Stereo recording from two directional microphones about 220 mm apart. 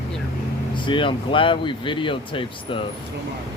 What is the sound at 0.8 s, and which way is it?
Speech, 20° left (ahead or behind).